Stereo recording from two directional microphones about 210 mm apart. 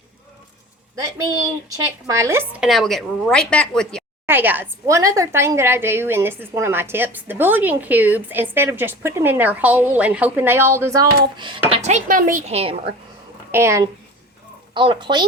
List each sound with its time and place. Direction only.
1.7 s speech: 15° right (ahead or behind); by 4.0 s 5° left (ahead or behind)
4.3 s a woman's voice: 10° right (ahead or behind)
11.7 s speech: 35° right (ahead or behind)
13.5 s a woman's voice: 15° right (ahead or behind)